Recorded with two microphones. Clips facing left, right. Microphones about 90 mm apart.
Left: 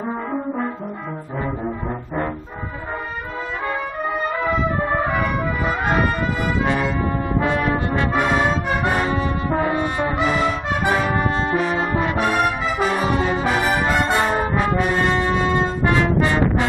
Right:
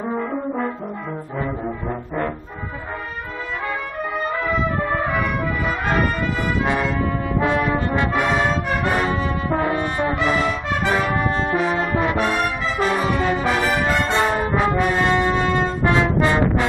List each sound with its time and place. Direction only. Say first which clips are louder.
1.9 s brass instrument: right 2 dB; 15° left (ahead or behind)
4.4 s music: even; 10° left (ahead or behind)
5.2 s brass instrument: left 1 dB; 15° left (ahead or behind)
8.2 s music: left 3 dB; 5° left (ahead or behind)
9.1 s brass instrument: left 1 dB; 10° left (ahead or behind)
11.1 s brass instrument: even; 25° left (ahead or behind)
11.5 s brass instrument: even; 10° right (ahead or behind)
12.3 s brass instrument: left 2 dB; 15° left (ahead or behind)
14.6 s brass instrument: right 2 dB; centre (ahead or behind)